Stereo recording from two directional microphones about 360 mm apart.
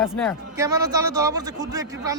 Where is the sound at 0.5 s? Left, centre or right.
Centre.